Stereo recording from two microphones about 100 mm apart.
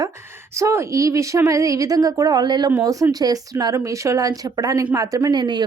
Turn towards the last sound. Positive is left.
turn(degrees=-50)  # may be behind; listen again after turning